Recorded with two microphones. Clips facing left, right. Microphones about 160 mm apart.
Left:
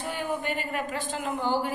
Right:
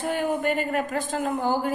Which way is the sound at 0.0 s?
50° right (ahead or behind).